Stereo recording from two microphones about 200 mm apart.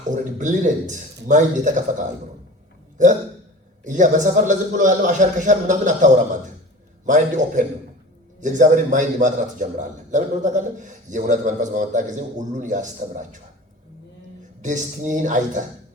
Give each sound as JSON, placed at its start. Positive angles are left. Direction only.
{"t": 0.1, "sound": "a man's voice", "side_deg": -40}
{"t": 3.8, "sound": "a man's voice", "side_deg": -40}
{"t": 14.6, "sound": "a man's voice", "side_deg": -40}